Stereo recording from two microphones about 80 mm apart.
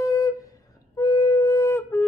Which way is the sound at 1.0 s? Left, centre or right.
Left.